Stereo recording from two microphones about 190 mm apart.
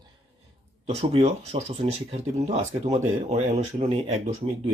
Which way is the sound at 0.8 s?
35° right (ahead or behind).